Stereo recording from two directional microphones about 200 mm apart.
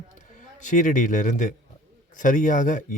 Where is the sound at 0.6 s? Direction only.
40° left (ahead or behind).